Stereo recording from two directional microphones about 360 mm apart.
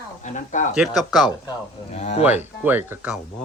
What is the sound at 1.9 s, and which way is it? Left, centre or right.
Speech, centre.